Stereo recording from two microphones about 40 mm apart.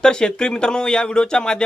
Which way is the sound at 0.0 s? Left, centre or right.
Centre.